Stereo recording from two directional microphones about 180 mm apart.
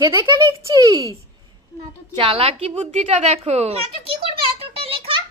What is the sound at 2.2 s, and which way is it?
A woman's voice, 30° right (ahead or behind).